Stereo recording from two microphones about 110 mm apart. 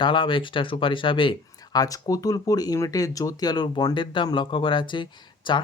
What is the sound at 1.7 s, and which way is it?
Speech, 35° left (ahead or behind).